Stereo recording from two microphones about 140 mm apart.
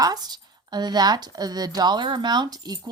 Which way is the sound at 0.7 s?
30° right (ahead or behind).